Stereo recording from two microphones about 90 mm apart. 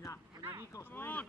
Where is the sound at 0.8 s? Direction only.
25° left (ahead or behind).